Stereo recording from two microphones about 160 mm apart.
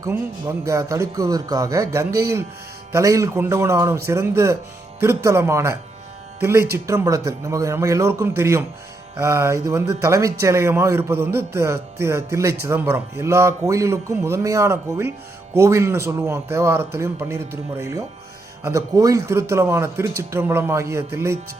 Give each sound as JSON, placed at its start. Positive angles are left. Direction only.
{"t": 0.0, "sound": "a man's voice", "side_deg": -20}